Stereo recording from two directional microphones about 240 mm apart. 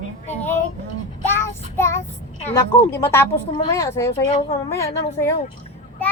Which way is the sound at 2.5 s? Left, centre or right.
Centre.